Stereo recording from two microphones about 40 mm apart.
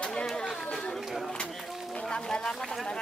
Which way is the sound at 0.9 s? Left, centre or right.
Centre.